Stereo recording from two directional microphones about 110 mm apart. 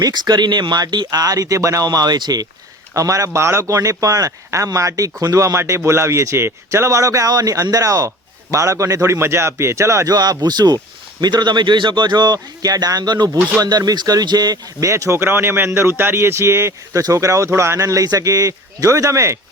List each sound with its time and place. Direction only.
0.0 s speech: 40° right (ahead or behind)